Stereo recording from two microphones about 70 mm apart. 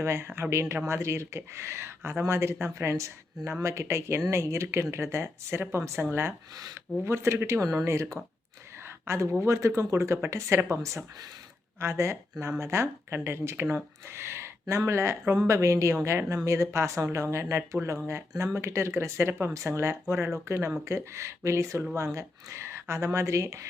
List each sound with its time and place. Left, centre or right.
0.0 s speech: right
7.6 s speech: right